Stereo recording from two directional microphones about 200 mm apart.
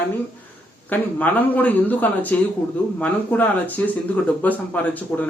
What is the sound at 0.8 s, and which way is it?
A man's voice, 10° left (ahead or behind).